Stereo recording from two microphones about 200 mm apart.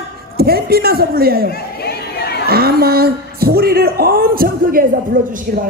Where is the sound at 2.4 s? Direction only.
50° right (ahead or behind).